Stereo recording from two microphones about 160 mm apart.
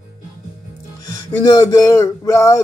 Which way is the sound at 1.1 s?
20° left (ahead or behind).